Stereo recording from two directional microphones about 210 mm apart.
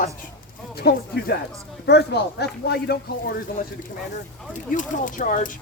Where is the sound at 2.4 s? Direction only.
50° left (ahead or behind).